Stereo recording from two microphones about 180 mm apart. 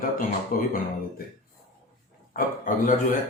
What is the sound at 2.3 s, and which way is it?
Speech, 50° left (ahead or behind).